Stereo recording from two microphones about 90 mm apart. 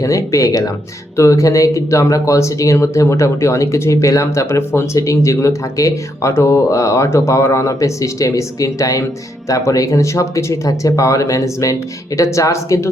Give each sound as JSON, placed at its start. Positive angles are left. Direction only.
{"t": 0.0, "sound": "speech", "side_deg": 35}